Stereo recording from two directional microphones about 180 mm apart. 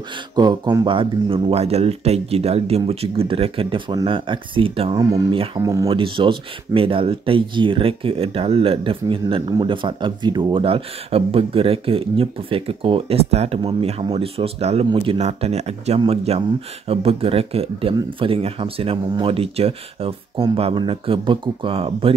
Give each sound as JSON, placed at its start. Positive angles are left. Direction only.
{"t": 0.4, "sound": "speech", "side_deg": -20}
{"t": 5.6, "sound": "speech", "side_deg": -15}
{"t": 5.9, "sound": "speech", "side_deg": -30}